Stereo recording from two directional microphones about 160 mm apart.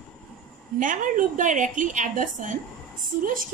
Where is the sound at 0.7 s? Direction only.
55° right (ahead or behind).